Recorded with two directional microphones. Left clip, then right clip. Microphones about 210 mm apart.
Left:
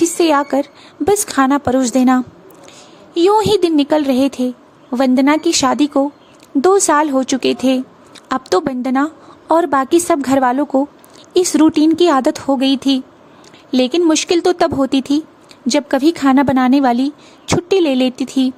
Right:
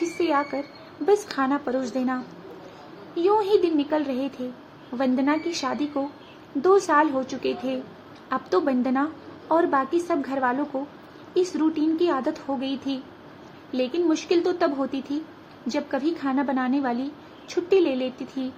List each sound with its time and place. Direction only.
0.0 s a woman's voice: 55° left (ahead or behind)